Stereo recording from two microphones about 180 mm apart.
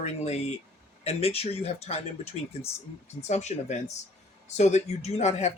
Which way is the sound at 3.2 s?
40° left (ahead or behind).